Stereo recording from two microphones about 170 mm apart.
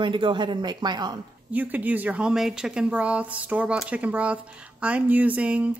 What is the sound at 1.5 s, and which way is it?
Speech, 10° right (ahead or behind).